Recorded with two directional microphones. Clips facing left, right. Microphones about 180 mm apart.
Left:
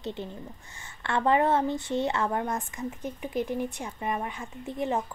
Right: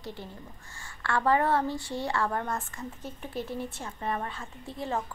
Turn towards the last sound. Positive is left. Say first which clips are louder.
# left 4 dB
turn(degrees=20)  # may be behind; listen again after turning